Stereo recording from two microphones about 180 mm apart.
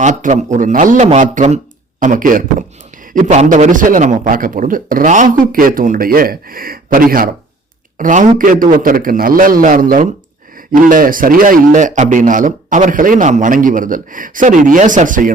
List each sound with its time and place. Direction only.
0.0 s a man's voice: 45° right (ahead or behind)